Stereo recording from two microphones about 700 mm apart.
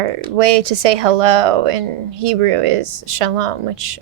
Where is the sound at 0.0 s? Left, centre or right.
Right.